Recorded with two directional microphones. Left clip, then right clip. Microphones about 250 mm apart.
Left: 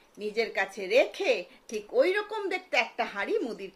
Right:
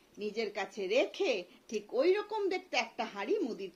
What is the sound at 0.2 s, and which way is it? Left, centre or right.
A woman's voice, centre.